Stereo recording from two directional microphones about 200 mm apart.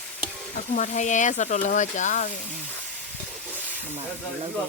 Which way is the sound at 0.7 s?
35° left (ahead or behind).